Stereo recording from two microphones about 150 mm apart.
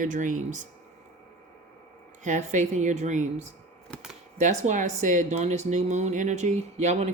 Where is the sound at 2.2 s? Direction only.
55° right (ahead or behind).